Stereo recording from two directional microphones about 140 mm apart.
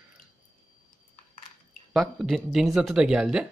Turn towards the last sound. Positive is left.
turn(degrees=-5)  # may be behind; listen again after turning